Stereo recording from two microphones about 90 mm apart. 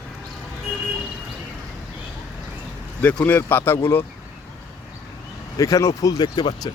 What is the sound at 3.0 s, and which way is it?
Speech, 20° left (ahead or behind).